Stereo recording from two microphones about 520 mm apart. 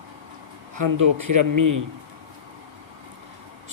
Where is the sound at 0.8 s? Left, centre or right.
Right.